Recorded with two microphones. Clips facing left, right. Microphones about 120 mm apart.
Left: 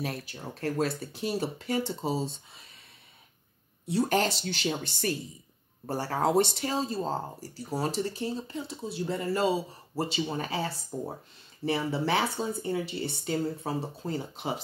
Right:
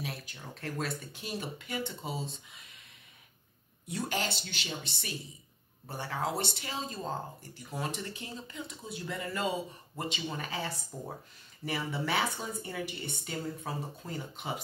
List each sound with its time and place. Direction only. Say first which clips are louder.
0.0 s speech: left 6 dB; 40° left (ahead or behind)
4.1 s speech: left 8 dB; 45° left (ahead or behind)